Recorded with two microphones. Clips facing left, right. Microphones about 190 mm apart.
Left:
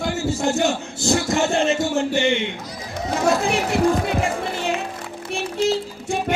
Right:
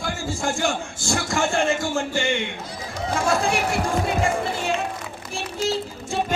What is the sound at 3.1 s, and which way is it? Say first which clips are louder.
Speech: left 2 dB; 20° left (ahead or behind).